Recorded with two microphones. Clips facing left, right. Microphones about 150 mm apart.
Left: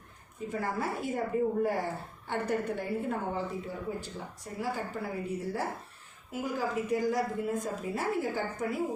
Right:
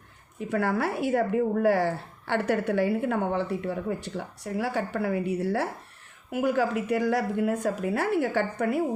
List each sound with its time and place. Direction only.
0.3 s a woman's voice: 70° right (ahead or behind)